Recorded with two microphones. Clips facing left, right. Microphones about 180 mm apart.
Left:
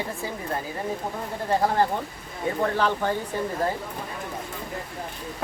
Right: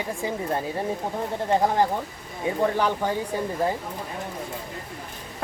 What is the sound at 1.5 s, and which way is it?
Speech, 20° right (ahead or behind).